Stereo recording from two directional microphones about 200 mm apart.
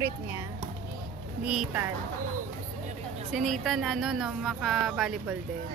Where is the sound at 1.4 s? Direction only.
5° right (ahead or behind).